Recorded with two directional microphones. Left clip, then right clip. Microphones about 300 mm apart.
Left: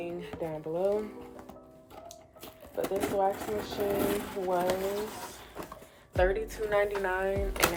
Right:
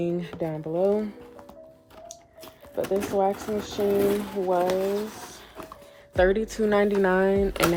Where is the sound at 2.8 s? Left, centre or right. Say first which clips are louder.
Right 4 dB; right.